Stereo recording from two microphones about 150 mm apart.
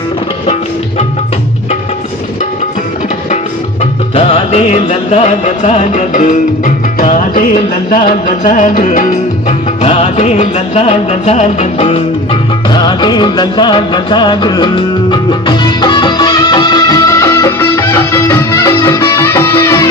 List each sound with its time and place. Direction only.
4.1 s music: 45° left (ahead or behind)
12.7 s music: 30° left (ahead or behind)